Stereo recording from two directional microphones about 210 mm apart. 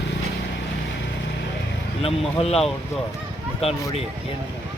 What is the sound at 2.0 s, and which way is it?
Speech, 25° left (ahead or behind).